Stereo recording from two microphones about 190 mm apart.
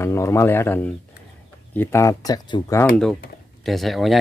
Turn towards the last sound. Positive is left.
turn(degrees=0)  # may be behind; listen again after turning